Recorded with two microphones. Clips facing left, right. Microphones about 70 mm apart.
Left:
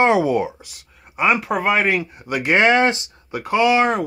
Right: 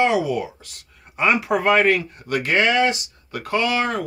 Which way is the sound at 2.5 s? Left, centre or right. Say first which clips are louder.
Left 4 dB; left.